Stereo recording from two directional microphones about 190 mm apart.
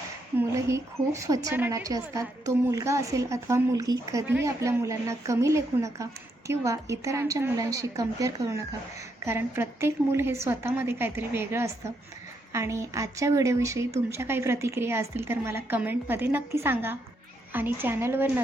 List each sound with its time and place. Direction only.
0.3 s a woman's voice: 15° right (ahead or behind)